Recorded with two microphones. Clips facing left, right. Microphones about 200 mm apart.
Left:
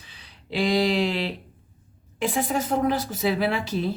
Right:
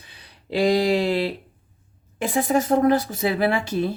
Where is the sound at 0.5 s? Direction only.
45° right (ahead or behind).